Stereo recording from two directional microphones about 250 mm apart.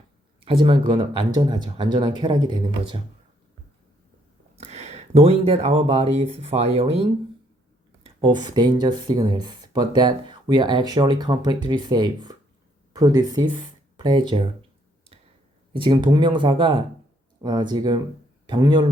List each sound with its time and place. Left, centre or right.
0.3 s speech: centre
4.5 s speech: right
15.7 s speech: centre